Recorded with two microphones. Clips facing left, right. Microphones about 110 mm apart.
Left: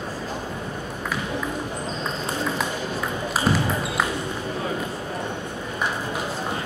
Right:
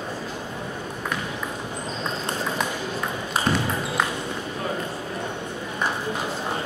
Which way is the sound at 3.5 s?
5° left (ahead or behind).